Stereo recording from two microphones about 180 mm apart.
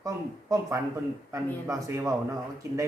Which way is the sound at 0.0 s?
15° right (ahead or behind).